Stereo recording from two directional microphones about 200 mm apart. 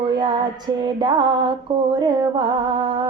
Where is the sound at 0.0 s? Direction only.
25° right (ahead or behind).